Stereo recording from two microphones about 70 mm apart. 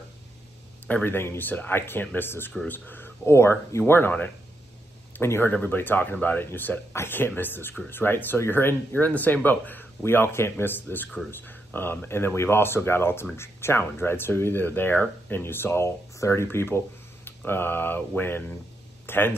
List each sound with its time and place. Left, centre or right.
1.0 s speech: left
3.3 s speech: left
5.1 s speech: left